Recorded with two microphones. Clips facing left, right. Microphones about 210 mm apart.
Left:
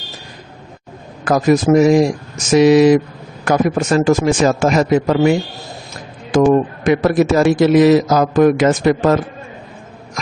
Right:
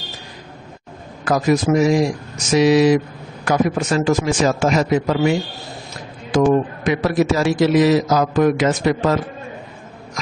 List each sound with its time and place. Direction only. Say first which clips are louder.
1.2 s a man's voice: left 4 dB; 50° left (ahead or behind)
6.3 s a man's voice: left 3 dB; 50° left (ahead or behind)